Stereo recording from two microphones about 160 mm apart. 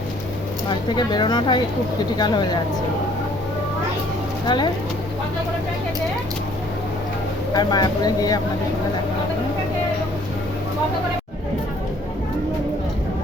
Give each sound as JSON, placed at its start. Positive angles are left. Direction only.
{"t": 0.7, "sound": "speech", "side_deg": 30}
{"t": 4.4, "sound": "speech", "side_deg": 30}
{"t": 7.5, "sound": "speech", "side_deg": 25}